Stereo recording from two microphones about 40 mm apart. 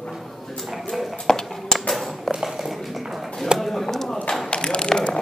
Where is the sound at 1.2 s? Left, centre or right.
Centre.